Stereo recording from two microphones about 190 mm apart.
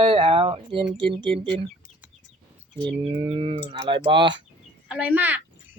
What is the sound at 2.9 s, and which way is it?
Speech, 30° right (ahead or behind).